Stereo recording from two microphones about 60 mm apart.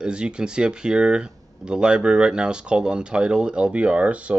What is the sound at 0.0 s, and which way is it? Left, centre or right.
Speech, centre.